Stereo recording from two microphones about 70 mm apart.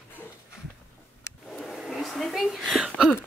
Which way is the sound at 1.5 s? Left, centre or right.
Centre.